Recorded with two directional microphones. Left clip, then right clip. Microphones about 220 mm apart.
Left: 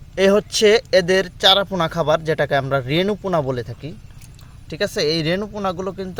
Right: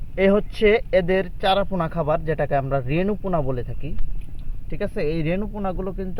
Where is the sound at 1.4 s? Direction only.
35° left (ahead or behind).